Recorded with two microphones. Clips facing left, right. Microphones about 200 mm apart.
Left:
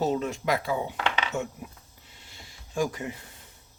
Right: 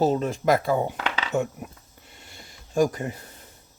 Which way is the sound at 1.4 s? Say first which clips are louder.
Right 6 dB; 55° right (ahead or behind).